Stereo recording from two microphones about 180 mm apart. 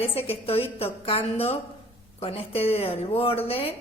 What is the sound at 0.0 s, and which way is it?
Speech, 30° left (ahead or behind).